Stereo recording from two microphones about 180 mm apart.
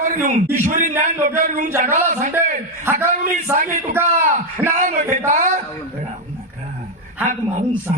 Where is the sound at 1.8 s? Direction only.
45° right (ahead or behind).